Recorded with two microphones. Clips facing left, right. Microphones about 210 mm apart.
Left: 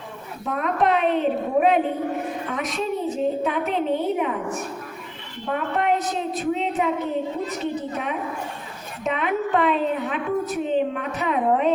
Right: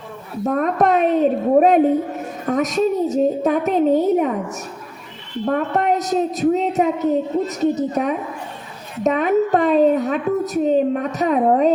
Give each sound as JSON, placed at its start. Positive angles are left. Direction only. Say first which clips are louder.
{"t": 0.4, "sound": "a woman's voice", "louder": "right 5 dB", "side_deg": -45}